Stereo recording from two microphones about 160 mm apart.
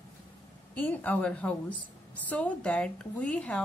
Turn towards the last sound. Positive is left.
turn(degrees=5)  # may be behind; listen again after turning